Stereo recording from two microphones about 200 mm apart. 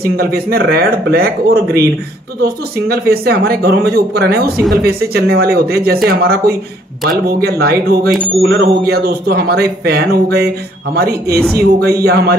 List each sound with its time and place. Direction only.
0.0 s speech: 50° right (ahead or behind)
11.3 s speech: 5° left (ahead or behind)
12.0 s speech: 55° right (ahead or behind)